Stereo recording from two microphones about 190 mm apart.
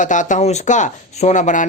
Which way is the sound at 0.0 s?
40° left (ahead or behind).